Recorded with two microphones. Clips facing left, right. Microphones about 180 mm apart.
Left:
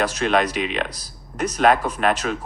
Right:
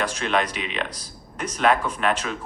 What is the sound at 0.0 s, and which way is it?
Speech, 40° left (ahead or behind).